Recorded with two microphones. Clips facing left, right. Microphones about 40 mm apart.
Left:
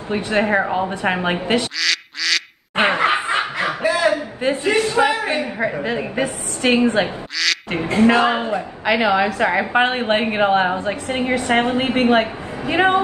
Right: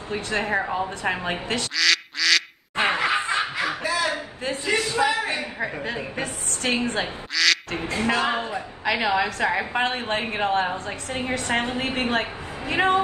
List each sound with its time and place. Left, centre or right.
0.1 s a woman's voice: left
1.8 s duck: centre
2.7 s snicker: left
5.6 s a woman's voice: left
7.4 s duck: centre
7.7 s a woman's voice: left
10.7 s a woman's voice: left
12.1 s a woman's voice: left